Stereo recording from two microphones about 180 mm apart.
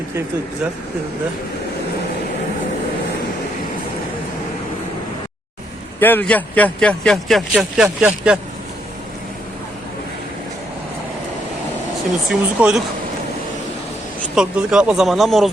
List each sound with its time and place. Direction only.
6.0 s speech: 10° left (ahead or behind); by 8.4 s 5° right (ahead or behind)
12.3 s speech: 5° right (ahead or behind)
14.3 s speech: 5° right (ahead or behind)